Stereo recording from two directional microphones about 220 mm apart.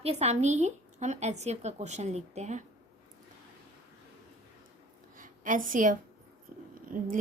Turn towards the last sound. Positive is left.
turn(degrees=-35)  # may be behind; listen again after turning